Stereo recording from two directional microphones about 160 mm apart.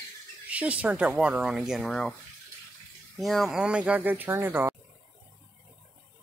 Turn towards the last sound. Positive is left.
turn(degrees=-15)  # may be behind; listen again after turning